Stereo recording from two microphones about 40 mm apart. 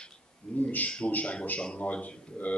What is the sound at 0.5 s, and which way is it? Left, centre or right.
Speech, left.